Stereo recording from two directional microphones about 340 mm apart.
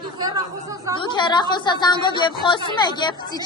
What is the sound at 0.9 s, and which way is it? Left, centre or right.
Speech, centre.